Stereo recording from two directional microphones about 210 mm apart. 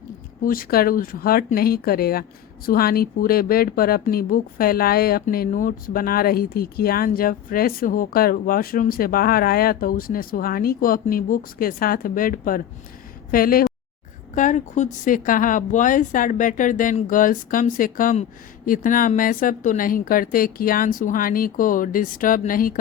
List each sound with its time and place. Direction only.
0.4 s a woman's voice: 45° left (ahead or behind)